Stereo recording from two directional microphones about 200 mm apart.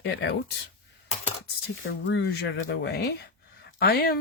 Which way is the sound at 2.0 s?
60° left (ahead or behind).